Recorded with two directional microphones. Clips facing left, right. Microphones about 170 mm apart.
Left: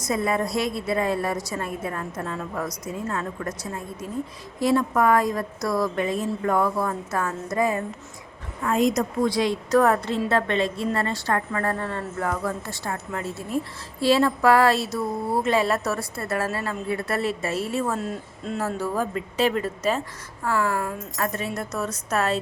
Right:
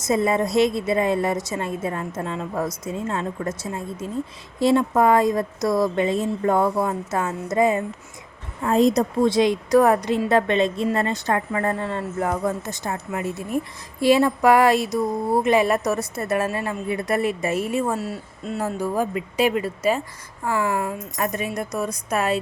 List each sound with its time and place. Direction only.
0.0 s a woman's voice: 25° right (ahead or behind)
8.6 s a woman's voice: 35° right (ahead or behind); by 22.4 s 15° right (ahead or behind)